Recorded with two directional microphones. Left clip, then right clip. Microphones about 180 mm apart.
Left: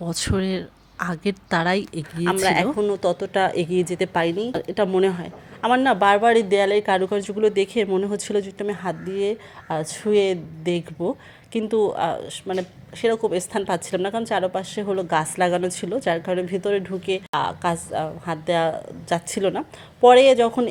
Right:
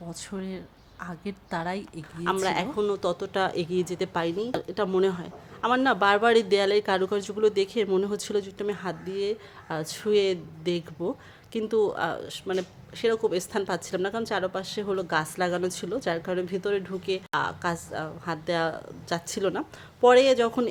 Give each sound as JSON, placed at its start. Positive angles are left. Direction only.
{"t": 0.0, "sound": "a woman's voice", "side_deg": 30}
{"t": 2.4, "sound": "speech", "side_deg": 10}